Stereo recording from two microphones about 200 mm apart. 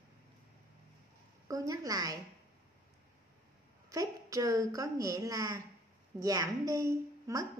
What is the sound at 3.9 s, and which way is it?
A woman's voice, 15° right (ahead or behind).